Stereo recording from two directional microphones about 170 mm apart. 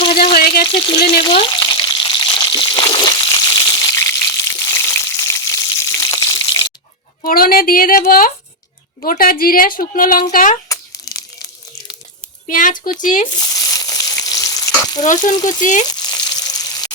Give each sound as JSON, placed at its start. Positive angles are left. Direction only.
{"t": 0.3, "sound": "a sound", "side_deg": 65}
{"t": 1.2, "sound": "frying", "side_deg": 30}
{"t": 7.2, "sound": "a sound", "side_deg": 55}
{"t": 9.0, "sound": "a woman's voice", "side_deg": 60}
{"t": 10.7, "sound": "crumpling", "side_deg": 20}
{"t": 12.5, "sound": "speech", "side_deg": 50}
{"t": 13.3, "sound": "frying", "side_deg": 20}
{"t": 15.0, "sound": "speech", "side_deg": 45}
{"t": 15.9, "sound": "frying", "side_deg": 25}